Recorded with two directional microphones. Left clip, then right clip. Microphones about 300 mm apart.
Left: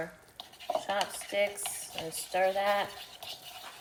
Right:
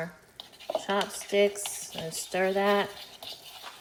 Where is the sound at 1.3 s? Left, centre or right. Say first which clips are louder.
Right 6 dB; right.